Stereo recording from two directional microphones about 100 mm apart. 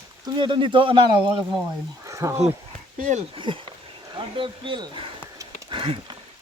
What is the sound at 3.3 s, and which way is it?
Speech, 55° right (ahead or behind).